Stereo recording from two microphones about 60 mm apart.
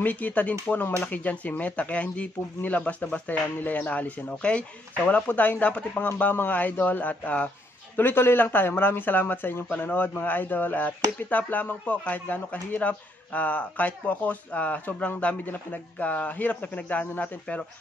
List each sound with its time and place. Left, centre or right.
0.0 s a man's voice: left